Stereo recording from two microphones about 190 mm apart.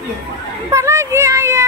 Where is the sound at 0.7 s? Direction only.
15° right (ahead or behind).